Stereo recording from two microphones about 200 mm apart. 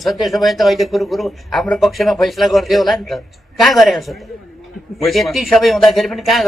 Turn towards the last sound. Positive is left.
turn(degrees=0)  # may be behind; listen again after turning